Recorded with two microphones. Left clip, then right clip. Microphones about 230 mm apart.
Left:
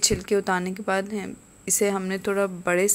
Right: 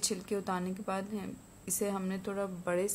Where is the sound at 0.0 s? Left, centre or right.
Left.